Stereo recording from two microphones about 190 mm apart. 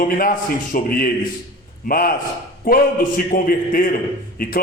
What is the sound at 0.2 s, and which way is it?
A man's voice, 50° left (ahead or behind).